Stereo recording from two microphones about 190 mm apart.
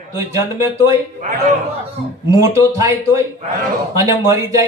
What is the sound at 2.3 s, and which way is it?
Speech, 15° right (ahead or behind).